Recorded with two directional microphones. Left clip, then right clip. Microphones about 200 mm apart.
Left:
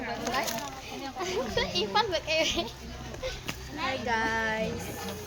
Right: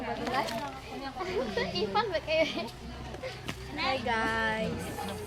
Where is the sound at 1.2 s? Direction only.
55° left (ahead or behind).